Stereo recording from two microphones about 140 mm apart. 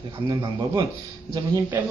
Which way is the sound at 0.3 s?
30° right (ahead or behind).